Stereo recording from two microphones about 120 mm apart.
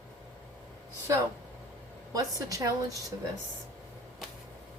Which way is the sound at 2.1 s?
30° right (ahead or behind).